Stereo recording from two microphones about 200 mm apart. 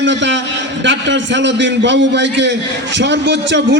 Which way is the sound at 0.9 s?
65° right (ahead or behind).